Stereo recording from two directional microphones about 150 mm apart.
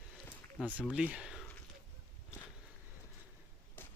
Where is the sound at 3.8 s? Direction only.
15° left (ahead or behind).